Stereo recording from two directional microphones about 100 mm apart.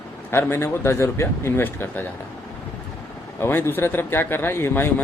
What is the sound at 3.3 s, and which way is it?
Speech, 25° left (ahead or behind).